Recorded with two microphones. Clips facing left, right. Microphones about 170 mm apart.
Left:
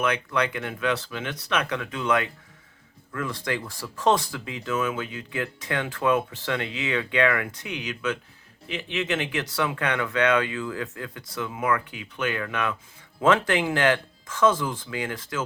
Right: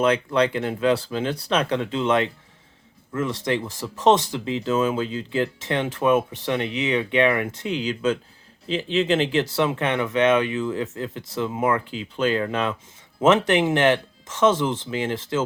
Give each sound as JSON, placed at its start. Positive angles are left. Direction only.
{"t": 0.0, "sound": "speech", "side_deg": -30}